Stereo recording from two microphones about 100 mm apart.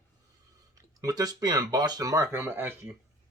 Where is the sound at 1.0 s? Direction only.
40° right (ahead or behind); by 2.9 s 20° right (ahead or behind).